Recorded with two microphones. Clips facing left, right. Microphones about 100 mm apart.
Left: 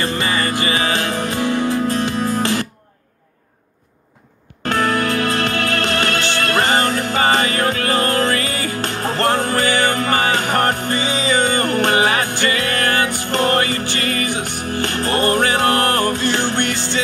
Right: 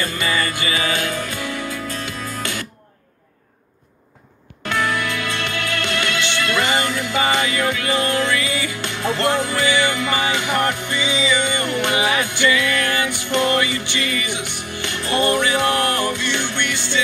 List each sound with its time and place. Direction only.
0.0 s music: 35° left (ahead or behind)
4.6 s music: 40° left (ahead or behind)